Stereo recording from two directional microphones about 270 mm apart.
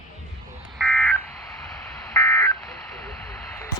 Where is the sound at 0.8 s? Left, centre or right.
Centre.